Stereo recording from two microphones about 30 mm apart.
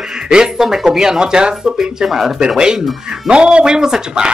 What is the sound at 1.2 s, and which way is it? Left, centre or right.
Speech, right.